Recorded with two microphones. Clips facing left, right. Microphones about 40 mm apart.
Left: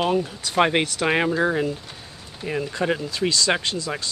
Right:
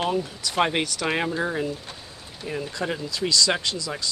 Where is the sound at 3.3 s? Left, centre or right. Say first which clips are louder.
Right 1 dB; left.